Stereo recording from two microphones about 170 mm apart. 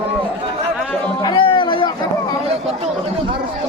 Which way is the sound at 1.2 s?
30° left (ahead or behind).